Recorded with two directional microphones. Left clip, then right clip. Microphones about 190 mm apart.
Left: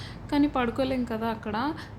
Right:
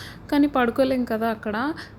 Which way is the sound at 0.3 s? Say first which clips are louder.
Right 5 dB; 30° right (ahead or behind).